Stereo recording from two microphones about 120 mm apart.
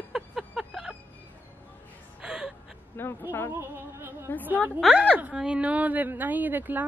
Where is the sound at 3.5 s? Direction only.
20° right (ahead or behind).